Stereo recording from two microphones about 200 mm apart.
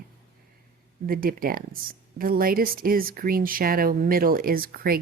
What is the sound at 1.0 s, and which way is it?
Speech, 45° right (ahead or behind).